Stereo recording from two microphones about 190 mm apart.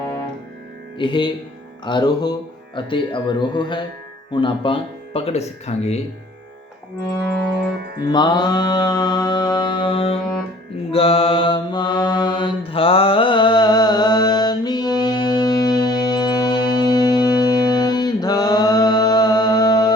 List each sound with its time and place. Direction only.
0.9 s speech: 25° left (ahead or behind)
7.9 s mantra: 20° left (ahead or behind)